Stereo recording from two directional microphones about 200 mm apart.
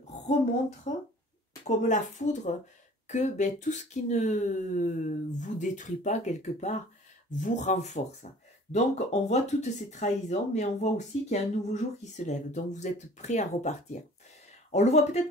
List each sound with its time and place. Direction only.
1.6 s speech: 35° left (ahead or behind)